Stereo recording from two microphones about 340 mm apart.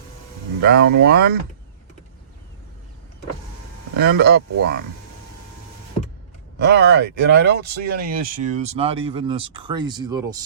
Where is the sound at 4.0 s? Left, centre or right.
Right.